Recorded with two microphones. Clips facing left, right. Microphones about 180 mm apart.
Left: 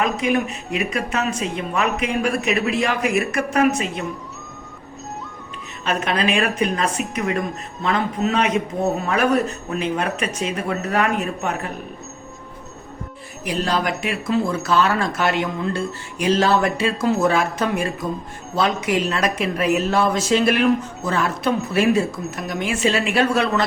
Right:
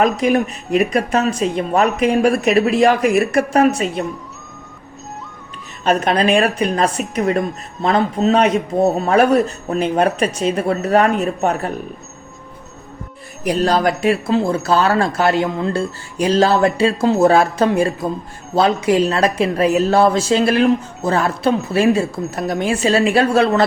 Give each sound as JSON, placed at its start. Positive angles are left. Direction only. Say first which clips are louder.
{"t": 0.0, "sound": "a woman's voice", "louder": "right 5 dB", "side_deg": -35}
{"t": 5.8, "sound": "a woman's voice", "louder": "right 6 dB", "side_deg": -35}
{"t": 13.4, "sound": "a woman's voice", "louder": "right 6 dB", "side_deg": -40}